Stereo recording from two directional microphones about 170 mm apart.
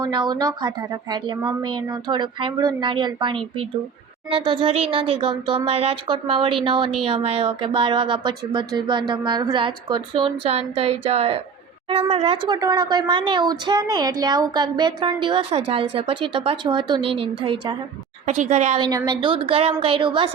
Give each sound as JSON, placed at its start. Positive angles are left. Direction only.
{"t": 0.0, "sound": "speech", "side_deg": -25}
{"t": 18.3, "sound": "a woman's voice", "side_deg": -45}
{"t": 18.8, "sound": "speech", "side_deg": -25}